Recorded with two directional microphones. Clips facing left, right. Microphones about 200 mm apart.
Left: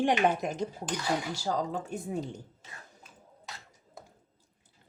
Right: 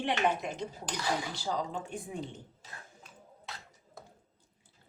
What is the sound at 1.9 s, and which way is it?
Speech, 40° left (ahead or behind).